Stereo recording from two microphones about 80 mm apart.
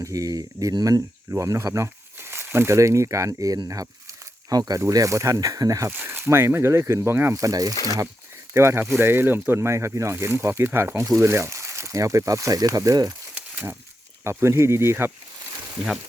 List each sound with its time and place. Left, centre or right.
0.0 s speech: right
1.4 s speech: right
2.1 s speech: right
3.7 s a sound: right
4.8 s speech: right
5.9 s speech: right
7.3 s speech: right
8.5 s speech: right
14.3 s speech: right